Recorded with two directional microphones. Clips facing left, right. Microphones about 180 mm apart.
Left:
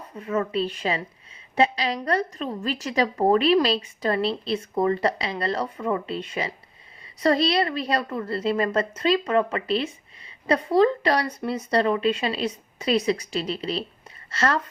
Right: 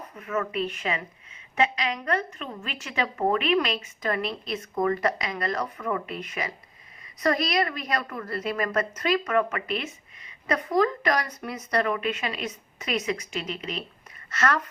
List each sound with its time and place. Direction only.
0.2 s a woman's voice: 30° left (ahead or behind)